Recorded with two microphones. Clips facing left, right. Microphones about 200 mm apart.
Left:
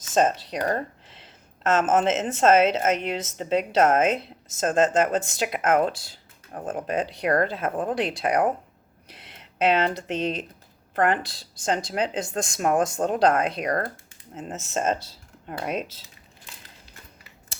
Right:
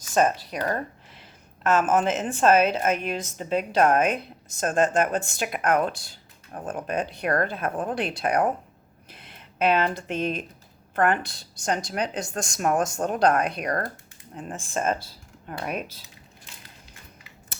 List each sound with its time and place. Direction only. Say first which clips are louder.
0.1 s a woman's voice: left 1 dB; 25° left (ahead or behind)
9.0 s a sound: even; 85° left
9.3 s a woman's voice: left 1 dB; 20° left (ahead or behind)